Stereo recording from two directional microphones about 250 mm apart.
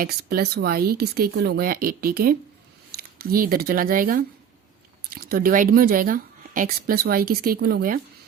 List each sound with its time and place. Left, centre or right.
0.0 s speech: right